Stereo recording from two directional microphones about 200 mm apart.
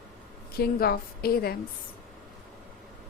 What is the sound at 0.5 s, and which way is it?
A woman's voice, 50° left (ahead or behind).